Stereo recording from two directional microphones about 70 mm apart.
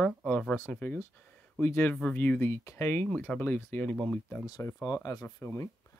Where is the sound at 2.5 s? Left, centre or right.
Left.